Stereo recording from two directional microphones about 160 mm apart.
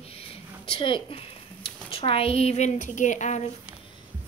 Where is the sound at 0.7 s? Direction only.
30° left (ahead or behind).